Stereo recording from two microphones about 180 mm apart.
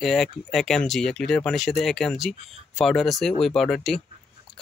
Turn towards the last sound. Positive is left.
turn(degrees=0)  # may be behind; listen again after turning